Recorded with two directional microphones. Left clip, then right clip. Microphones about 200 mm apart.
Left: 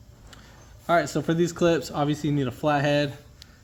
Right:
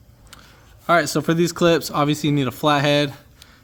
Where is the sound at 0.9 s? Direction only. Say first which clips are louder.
Right 5 dB; 50° right (ahead or behind).